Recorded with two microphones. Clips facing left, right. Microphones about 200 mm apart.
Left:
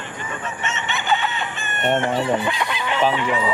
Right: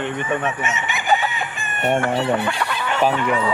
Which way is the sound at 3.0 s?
Centre (ahead or behind).